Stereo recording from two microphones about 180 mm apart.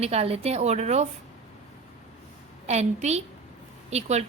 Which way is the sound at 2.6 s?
35° right (ahead or behind).